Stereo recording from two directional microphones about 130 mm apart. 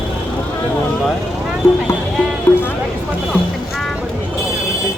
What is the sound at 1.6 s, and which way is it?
Clip-clop, 20° left (ahead or behind).